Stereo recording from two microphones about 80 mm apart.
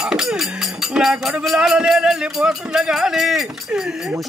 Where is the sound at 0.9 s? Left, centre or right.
Centre.